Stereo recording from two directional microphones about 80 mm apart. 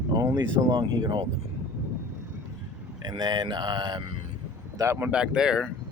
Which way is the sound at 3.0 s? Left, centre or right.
Right.